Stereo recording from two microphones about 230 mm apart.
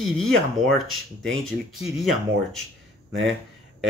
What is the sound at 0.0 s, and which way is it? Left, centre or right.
Speech, centre.